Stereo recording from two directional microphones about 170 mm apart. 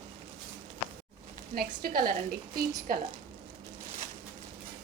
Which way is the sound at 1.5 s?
60° right (ahead or behind).